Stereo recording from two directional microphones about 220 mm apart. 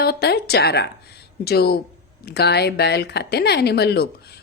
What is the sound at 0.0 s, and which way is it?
A woman's voice, 45° left (ahead or behind).